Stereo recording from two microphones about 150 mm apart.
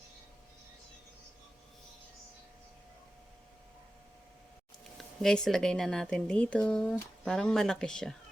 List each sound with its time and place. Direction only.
4.9 s speech: 5° left (ahead or behind)